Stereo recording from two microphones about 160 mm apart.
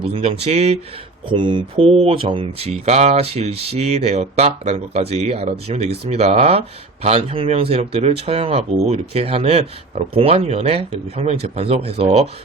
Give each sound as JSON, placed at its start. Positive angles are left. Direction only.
{"t": 0.1, "sound": "speech", "side_deg": -40}
{"t": 1.3, "sound": "speech", "side_deg": -30}